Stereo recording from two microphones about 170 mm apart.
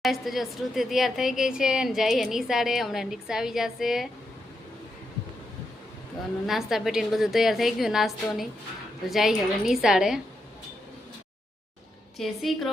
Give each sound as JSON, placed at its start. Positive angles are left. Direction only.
{"t": 0.0, "sound": "a woman's voice", "side_deg": 0}
{"t": 6.5, "sound": "a woman's voice", "side_deg": 0}
{"t": 12.1, "sound": "a woman's voice", "side_deg": 0}